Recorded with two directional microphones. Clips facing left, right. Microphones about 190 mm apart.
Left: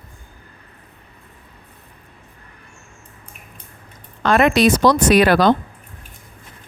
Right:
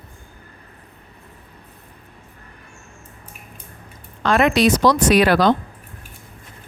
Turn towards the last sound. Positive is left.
turn(degrees=55)  # may be behind; listen again after turning